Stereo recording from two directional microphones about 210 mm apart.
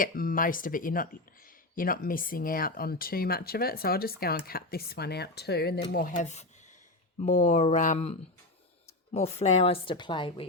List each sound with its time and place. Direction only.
0.0 s speech: 40° left (ahead or behind)
9.1 s a woman's voice: 30° left (ahead or behind)